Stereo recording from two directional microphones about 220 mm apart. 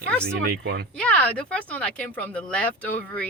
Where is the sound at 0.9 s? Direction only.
5° left (ahead or behind).